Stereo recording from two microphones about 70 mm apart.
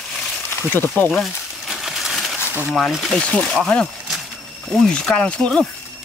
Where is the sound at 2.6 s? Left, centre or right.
Centre.